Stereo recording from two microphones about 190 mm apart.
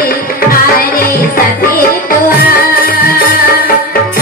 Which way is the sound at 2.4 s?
50° left (ahead or behind).